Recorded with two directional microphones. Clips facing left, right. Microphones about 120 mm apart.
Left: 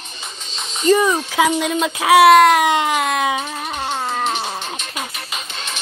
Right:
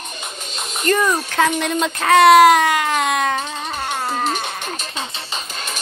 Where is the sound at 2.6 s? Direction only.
20° left (ahead or behind).